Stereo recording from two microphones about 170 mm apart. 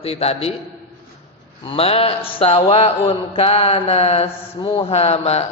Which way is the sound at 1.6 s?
35° left (ahead or behind).